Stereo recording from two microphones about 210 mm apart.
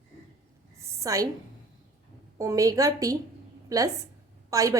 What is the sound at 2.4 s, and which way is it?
A woman's voice, 15° right (ahead or behind).